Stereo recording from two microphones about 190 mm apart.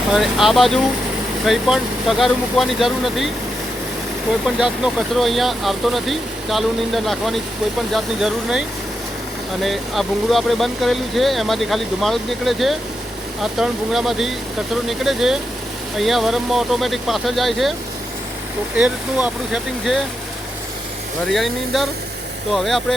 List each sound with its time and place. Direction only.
0.1 s speech: centre (ahead or behind)
18.8 s speech: 5° right (ahead or behind)
21.2 s speech: centre (ahead or behind)